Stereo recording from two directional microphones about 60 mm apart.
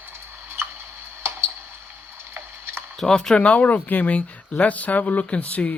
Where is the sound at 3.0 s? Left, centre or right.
Centre; by 5.7 s left.